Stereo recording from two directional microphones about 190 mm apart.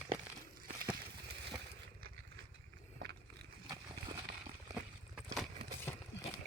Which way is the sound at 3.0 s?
60° right (ahead or behind).